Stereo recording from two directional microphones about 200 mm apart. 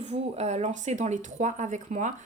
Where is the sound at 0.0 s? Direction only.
35° right (ahead or behind).